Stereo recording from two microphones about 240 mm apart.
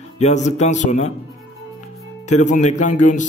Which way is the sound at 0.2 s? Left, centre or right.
Left.